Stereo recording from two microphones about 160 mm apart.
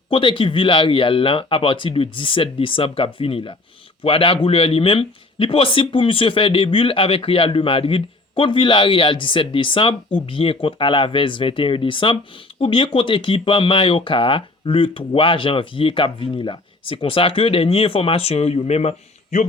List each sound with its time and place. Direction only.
0.1 s speech: 30° left (ahead or behind)